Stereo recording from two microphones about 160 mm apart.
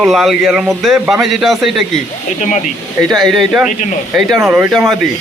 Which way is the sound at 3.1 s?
Centre (ahead or behind).